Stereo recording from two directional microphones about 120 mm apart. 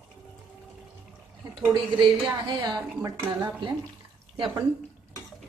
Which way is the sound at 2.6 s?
35° right (ahead or behind).